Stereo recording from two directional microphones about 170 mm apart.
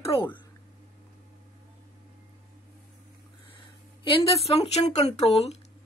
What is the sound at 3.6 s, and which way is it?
Speech, 30° left (ahead or behind).